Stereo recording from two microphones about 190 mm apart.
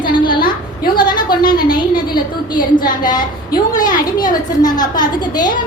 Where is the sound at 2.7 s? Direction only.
20° left (ahead or behind).